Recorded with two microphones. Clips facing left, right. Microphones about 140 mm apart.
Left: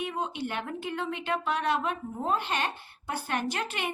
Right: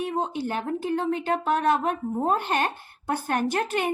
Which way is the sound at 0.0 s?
35° right (ahead or behind).